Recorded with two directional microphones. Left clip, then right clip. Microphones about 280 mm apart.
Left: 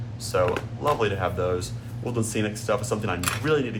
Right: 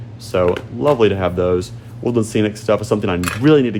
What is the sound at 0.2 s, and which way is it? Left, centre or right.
Speech, right.